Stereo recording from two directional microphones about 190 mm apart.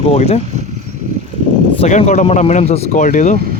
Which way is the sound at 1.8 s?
40° left (ahead or behind).